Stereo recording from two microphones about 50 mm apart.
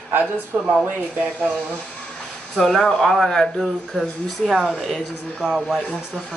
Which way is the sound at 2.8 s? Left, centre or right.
Centre.